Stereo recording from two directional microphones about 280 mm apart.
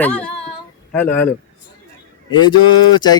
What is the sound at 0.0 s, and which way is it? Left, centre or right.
Speech, centre.